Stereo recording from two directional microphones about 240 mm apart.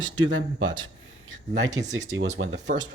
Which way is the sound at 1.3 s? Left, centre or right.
Right.